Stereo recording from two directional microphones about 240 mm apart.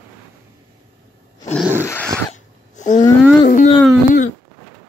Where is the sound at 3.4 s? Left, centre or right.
Left.